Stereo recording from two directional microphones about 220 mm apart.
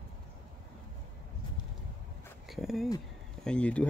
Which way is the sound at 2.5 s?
Centre (ahead or behind).